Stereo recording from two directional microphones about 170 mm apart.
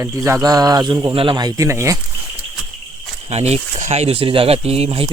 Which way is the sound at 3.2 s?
40° right (ahead or behind).